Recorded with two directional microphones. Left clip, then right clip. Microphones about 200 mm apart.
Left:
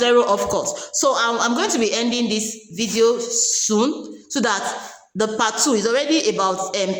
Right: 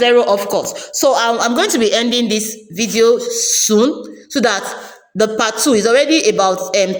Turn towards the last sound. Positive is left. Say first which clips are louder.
# right 7 dB
turn(degrees=-20)  # may be behind; listen again after turning